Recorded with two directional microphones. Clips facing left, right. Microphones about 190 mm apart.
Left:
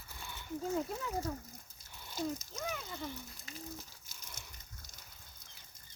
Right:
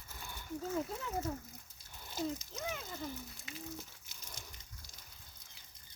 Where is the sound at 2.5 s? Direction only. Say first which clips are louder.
Left 1 dB; 20° right (ahead or behind).